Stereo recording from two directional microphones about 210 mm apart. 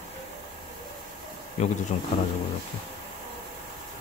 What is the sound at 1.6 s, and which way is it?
Speech, 35° left (ahead or behind).